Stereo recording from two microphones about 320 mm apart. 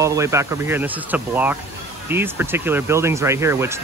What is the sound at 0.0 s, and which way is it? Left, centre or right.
Speech, centre.